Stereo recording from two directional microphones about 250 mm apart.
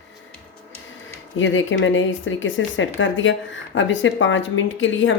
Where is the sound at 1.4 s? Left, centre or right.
Left.